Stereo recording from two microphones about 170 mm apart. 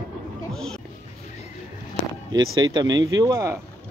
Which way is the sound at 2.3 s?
25° right (ahead or behind).